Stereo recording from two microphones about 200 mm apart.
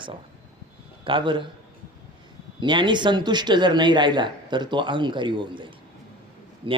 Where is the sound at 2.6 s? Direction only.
25° right (ahead or behind).